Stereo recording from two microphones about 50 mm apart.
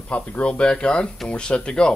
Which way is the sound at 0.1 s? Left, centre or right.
Left.